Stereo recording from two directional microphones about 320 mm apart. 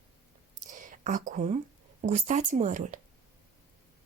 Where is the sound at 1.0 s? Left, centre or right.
Right.